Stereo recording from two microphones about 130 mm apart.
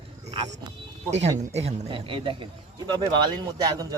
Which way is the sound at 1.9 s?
40° right (ahead or behind).